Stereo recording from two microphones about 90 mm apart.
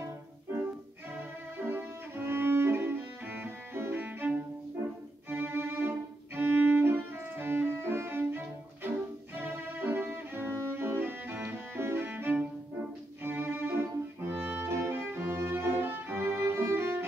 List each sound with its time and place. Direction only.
1.6 s music: 25° right (ahead or behind)
9.3 s cello: 20° right (ahead or behind)
13.2 s music: 25° right (ahead or behind)
14.3 s violin: 20° right (ahead or behind)